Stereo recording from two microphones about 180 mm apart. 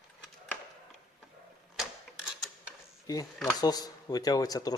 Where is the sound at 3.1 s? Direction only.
20° left (ahead or behind).